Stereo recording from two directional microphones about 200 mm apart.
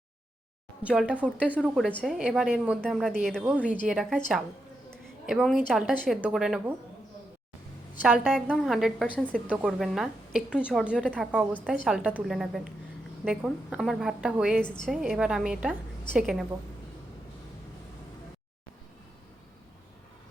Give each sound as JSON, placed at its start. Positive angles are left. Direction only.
{"t": 0.9, "sound": "a woman's voice", "side_deg": -5}
{"t": 8.0, "sound": "a woman's voice", "side_deg": 0}